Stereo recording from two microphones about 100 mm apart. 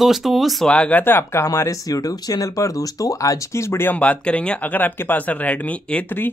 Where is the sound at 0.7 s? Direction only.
15° left (ahead or behind).